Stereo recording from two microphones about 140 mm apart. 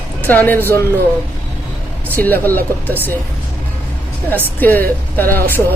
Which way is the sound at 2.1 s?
15° left (ahead or behind).